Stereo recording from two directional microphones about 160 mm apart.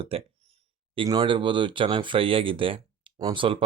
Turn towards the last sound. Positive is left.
turn(degrees=-35)  # may be behind; listen again after turning